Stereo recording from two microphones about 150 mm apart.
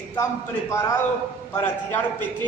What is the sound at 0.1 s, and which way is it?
A man's voice, 20° left (ahead or behind).